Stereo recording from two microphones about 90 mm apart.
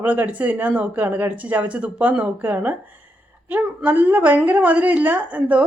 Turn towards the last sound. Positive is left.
turn(degrees=-15)  # may be behind; listen again after turning